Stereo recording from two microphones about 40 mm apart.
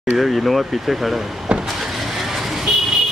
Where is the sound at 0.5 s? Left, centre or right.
Centre.